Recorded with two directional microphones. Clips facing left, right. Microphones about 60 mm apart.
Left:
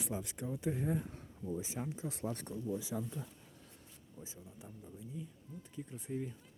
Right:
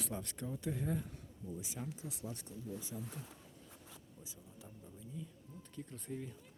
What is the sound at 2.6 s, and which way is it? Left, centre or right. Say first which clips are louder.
Speech: left 7 dB; left.